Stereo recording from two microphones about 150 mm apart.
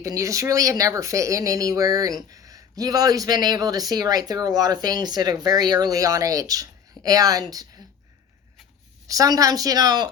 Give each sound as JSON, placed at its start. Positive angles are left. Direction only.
{"t": 0.0, "sound": "speech", "side_deg": -20}
{"t": 9.0, "sound": "speech", "side_deg": -25}